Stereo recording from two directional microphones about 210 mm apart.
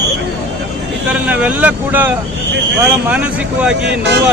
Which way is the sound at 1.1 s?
5° right (ahead or behind).